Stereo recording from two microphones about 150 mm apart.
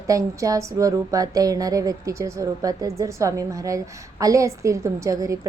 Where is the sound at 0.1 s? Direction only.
20° right (ahead or behind).